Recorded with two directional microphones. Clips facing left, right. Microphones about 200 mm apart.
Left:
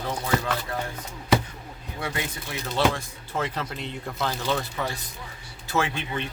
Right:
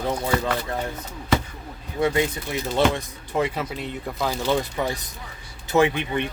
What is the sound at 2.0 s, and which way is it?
Speech, 20° right (ahead or behind).